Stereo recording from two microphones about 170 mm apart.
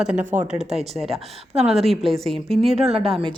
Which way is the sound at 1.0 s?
35° right (ahead or behind).